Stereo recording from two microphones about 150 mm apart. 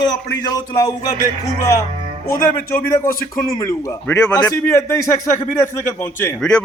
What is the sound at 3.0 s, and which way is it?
A man's voice, 20° left (ahead or behind).